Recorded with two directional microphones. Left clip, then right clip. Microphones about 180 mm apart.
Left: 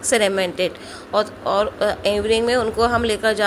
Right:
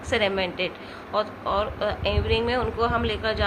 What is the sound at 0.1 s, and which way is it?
A woman's voice, 40° left (ahead or behind).